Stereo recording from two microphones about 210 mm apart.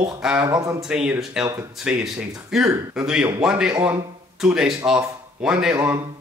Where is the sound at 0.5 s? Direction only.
15° right (ahead or behind).